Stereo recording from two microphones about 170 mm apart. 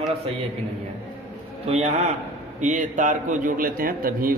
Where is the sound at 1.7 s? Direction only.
40° right (ahead or behind).